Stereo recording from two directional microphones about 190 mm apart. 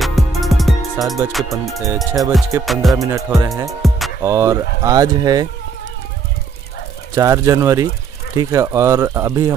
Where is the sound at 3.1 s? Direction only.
15° right (ahead or behind).